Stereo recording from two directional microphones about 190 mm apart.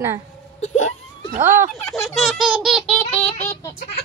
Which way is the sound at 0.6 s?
40° left (ahead or behind).